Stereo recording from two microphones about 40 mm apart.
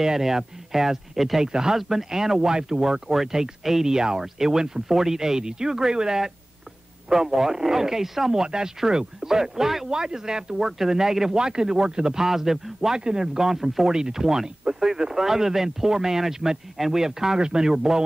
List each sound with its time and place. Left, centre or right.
0.0 s speech: centre
1.5 s speech: centre